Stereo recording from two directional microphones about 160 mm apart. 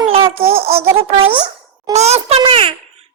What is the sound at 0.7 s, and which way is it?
Speech, 40° right (ahead or behind).